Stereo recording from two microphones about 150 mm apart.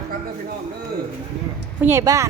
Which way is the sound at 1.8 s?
15° right (ahead or behind).